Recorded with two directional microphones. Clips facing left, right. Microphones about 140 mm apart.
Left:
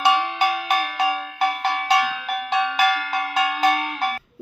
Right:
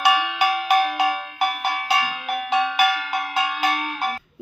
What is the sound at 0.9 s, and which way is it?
Cowbell, 15° right (ahead or behind).